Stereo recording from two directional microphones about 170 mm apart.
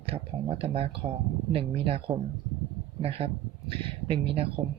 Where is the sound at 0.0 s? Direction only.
35° right (ahead or behind).